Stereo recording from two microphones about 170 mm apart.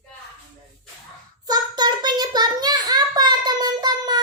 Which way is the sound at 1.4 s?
25° right (ahead or behind).